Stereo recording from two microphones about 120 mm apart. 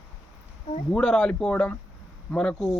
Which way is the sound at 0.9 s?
5° left (ahead or behind).